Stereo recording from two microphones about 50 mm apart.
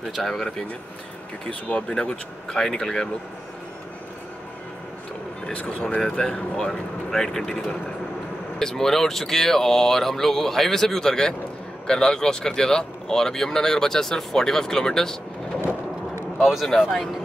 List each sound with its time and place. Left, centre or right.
0.1 s speech: centre
1.5 s speech: left
2.0 s speech: centre
5.9 s speech: centre